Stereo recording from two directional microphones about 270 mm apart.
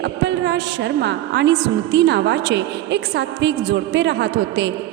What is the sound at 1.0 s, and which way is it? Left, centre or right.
A woman's voice, right.